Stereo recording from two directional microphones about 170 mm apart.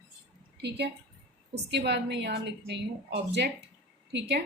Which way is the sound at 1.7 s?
90° right.